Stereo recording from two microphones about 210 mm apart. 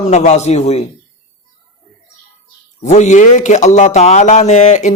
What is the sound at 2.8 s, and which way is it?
Speech, 35° left (ahead or behind).